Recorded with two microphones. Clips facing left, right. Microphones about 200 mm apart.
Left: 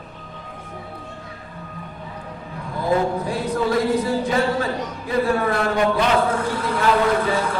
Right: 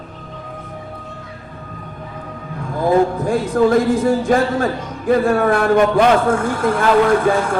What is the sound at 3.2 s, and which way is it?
Speech, 50° right (ahead or behind).